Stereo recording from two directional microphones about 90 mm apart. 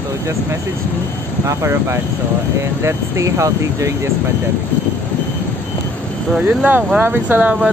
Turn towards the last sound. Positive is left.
turn(degrees=-20)  # may be behind; listen again after turning